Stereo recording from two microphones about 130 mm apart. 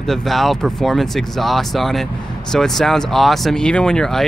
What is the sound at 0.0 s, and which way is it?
Speech, centre (ahead or behind).